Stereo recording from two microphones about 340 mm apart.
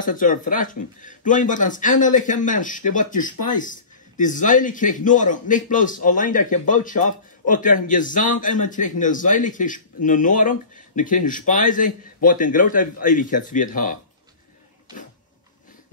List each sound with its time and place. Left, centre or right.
0.0 s a man's voice: left